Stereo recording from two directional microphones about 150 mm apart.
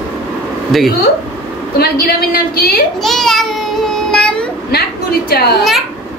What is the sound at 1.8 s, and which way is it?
A woman's voice, 90° left.